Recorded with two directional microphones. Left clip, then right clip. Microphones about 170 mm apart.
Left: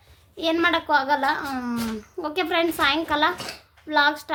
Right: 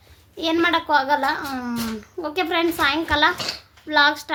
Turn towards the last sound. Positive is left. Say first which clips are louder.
# right 3 dB
turn(degrees=5)  # may be behind; listen again after turning